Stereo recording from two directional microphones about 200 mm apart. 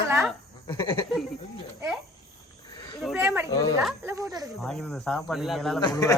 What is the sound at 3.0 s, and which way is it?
Speech, 5° right (ahead or behind).